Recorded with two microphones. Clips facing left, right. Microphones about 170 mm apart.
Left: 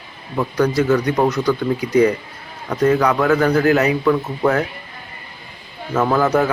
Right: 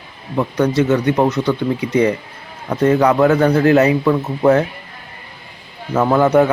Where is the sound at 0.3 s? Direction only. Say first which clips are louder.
Right 2 dB; 25° right (ahead or behind).